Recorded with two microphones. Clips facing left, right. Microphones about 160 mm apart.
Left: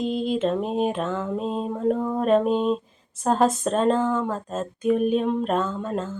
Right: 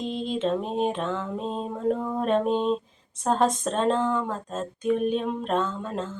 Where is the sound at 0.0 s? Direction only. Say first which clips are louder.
Left 4 dB; 5° left (ahead or behind).